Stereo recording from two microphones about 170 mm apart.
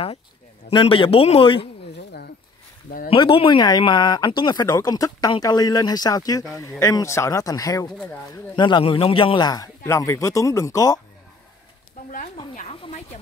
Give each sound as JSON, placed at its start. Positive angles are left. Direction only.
{"t": 0.7, "sound": "a man's voice", "side_deg": 30}
{"t": 3.1, "sound": "speech", "side_deg": 30}
{"t": 12.5, "sound": "a sound", "side_deg": 40}